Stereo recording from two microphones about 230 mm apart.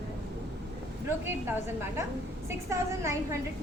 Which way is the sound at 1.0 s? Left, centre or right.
Centre.